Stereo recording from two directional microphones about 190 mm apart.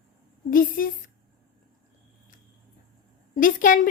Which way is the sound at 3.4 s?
45° left (ahead or behind).